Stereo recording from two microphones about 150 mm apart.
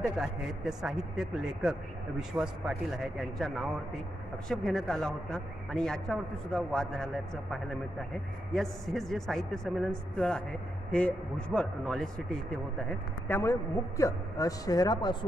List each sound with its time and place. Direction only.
0.2 s a man's voice: 5° right (ahead or behind)
8.5 s a man's voice: centre (ahead or behind)
13.3 s a man's voice: 20° left (ahead or behind)